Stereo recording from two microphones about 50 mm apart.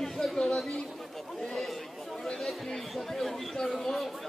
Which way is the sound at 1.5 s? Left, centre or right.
Centre.